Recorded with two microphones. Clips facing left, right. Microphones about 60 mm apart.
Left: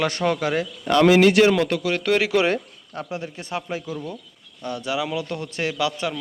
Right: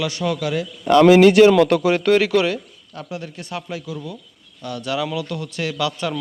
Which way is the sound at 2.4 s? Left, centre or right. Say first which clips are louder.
Left 1 dB; left.